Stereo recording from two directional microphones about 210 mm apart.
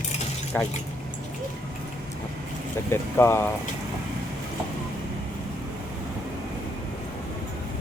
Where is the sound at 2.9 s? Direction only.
10° left (ahead or behind).